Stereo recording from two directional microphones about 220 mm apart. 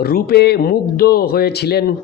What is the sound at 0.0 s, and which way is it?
A man's voice, 45° left (ahead or behind).